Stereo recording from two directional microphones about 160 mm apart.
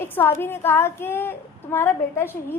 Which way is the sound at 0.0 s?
15° left (ahead or behind).